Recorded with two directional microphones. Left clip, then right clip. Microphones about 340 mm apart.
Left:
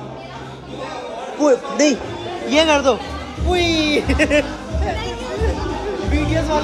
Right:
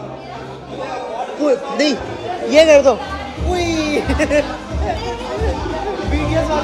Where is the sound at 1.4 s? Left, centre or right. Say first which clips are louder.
Left 1 dB; centre.